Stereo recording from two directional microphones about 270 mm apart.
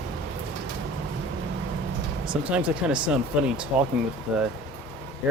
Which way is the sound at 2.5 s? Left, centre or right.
Centre.